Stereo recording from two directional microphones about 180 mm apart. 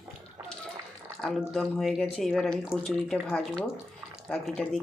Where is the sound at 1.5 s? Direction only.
Centre (ahead or behind).